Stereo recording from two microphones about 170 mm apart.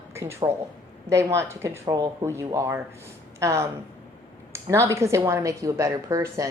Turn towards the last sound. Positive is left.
turn(degrees=-20)  # may be behind; listen again after turning